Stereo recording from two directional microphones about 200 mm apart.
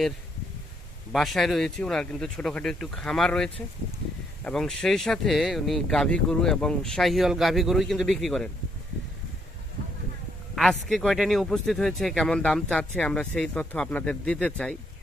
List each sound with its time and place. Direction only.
1.1 s a man's voice: centre (ahead or behind)
10.5 s a man's voice: centre (ahead or behind)